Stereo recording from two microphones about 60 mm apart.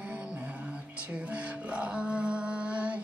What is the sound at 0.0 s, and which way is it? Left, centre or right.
Music, centre.